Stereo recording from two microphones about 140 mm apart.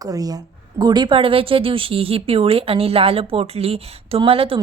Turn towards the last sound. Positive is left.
turn(degrees=-40)  # may be behind; listen again after turning